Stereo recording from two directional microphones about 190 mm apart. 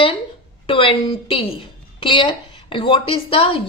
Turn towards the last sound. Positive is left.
turn(degrees=30)  # may be behind; listen again after turning